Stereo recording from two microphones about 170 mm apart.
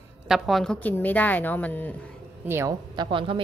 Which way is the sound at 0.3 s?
Centre (ahead or behind).